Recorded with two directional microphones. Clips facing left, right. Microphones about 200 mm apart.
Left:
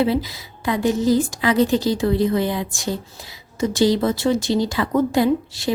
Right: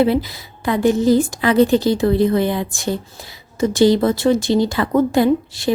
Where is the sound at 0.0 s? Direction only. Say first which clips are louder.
Right 3 dB; 55° right (ahead or behind).